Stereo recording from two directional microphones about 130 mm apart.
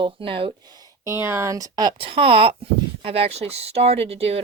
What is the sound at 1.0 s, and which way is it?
Speech, 20° right (ahead or behind).